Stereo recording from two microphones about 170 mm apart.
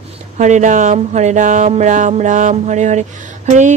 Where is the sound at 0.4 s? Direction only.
45° right (ahead or behind).